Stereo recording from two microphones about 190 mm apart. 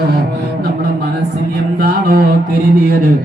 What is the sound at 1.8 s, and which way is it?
Mantra, 55° right (ahead or behind).